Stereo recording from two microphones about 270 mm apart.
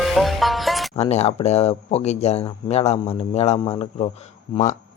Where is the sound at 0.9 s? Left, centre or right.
Left.